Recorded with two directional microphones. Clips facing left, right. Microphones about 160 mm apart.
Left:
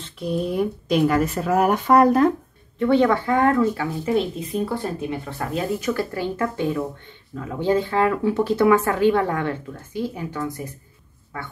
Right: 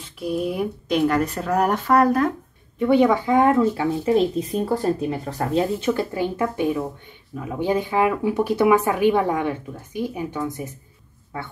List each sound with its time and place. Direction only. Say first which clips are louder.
0.0 s speech: even; 5° right (ahead or behind)
1.9 s speech: left 3 dB; 25° left (ahead or behind)
2.8 s speech: right 1 dB; 10° right (ahead or behind)
4.6 s speech: right 4 dB; 40° right (ahead or behind)